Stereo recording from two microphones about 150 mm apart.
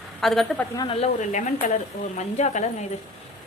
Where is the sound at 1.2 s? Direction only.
55° left (ahead or behind).